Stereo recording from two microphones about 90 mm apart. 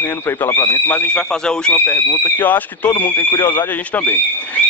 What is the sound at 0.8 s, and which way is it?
Speech, 15° left (ahead or behind).